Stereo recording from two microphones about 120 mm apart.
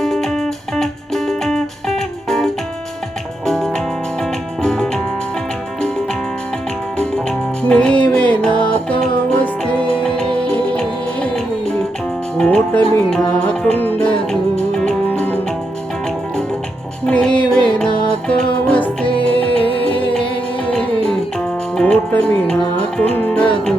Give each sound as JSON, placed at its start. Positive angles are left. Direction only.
{"t": 0.0, "sound": "music", "side_deg": 5}
{"t": 7.0, "sound": "music", "side_deg": 5}
{"t": 17.1, "sound": "music", "side_deg": 5}
{"t": 19.0, "sound": "music", "side_deg": 50}
{"t": 20.7, "sound": "music", "side_deg": 5}